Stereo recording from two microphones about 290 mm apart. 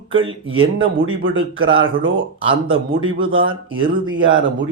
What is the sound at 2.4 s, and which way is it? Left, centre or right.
Speech, centre.